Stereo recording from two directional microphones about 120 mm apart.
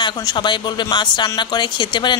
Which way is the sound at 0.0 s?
40° left (ahead or behind).